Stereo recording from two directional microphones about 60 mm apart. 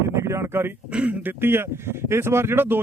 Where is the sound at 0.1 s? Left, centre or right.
Right.